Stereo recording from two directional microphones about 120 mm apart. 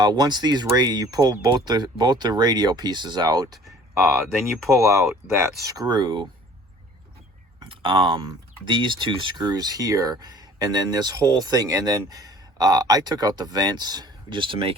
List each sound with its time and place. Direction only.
0.0 s speech: 35° right (ahead or behind)
4.0 s speech: centre (ahead or behind)
4.8 s speech: 25° right (ahead or behind); by 6.2 s 40° right (ahead or behind)
7.6 s a sound: 45° right (ahead or behind)
8.6 s speech: 40° right (ahead or behind)